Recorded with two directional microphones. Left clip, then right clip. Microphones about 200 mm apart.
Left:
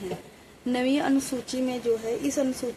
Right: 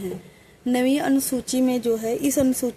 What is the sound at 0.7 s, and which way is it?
Speech, 45° right (ahead or behind).